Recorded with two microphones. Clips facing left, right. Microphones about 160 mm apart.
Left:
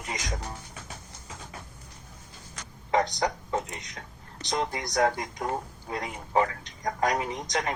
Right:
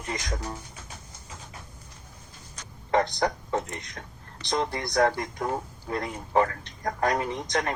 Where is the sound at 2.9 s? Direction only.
15° left (ahead or behind).